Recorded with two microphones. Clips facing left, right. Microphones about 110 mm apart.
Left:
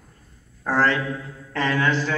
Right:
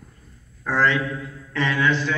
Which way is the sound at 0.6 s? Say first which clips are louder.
Even; 40° left (ahead or behind).